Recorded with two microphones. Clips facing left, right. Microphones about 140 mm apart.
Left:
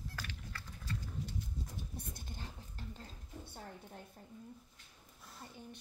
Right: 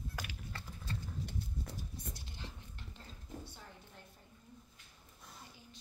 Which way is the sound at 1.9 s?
55° left (ahead or behind).